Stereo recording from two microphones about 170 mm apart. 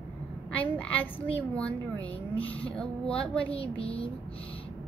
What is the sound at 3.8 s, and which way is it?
Speech, 35° left (ahead or behind).